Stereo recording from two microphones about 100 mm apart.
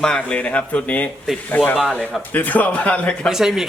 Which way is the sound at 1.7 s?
5° left (ahead or behind).